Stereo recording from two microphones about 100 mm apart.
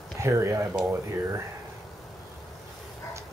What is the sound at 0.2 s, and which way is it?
Speech, 30° right (ahead or behind).